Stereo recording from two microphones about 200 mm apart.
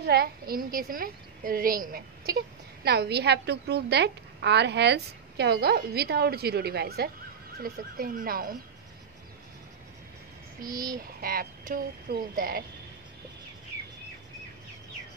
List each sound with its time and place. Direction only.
0.0 s a woman's voice: 50° right (ahead or behind)
10.7 s a sound: 15° right (ahead or behind)
11.0 s a woman's voice: 50° right (ahead or behind)